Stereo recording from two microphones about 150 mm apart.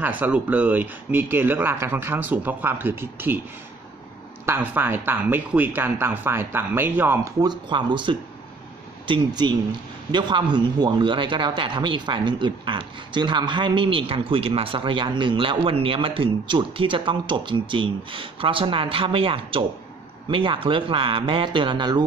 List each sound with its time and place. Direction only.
0.0 s speech: 10° right (ahead or behind)
4.5 s speech: 15° right (ahead or behind)
7.3 s a man's voice: 30° right (ahead or behind)